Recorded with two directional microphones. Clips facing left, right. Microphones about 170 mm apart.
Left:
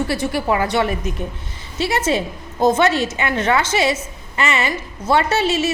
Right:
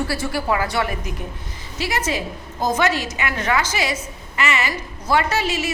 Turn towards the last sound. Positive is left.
turn(degrees=25)  # may be behind; listen again after turning